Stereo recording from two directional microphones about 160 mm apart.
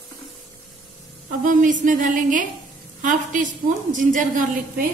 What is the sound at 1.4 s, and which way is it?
A woman's voice, 55° right (ahead or behind).